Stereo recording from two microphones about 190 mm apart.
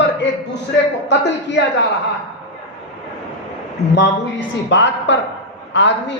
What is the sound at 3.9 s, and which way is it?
A woman's voice, 70° left (ahead or behind).